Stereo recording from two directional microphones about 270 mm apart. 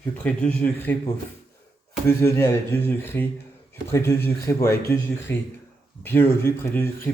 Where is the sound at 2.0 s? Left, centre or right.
Centre.